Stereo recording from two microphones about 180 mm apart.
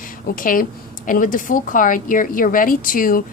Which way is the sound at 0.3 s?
50° left (ahead or behind).